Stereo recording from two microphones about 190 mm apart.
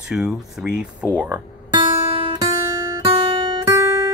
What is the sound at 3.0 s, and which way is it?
Guitar, 30° right (ahead or behind).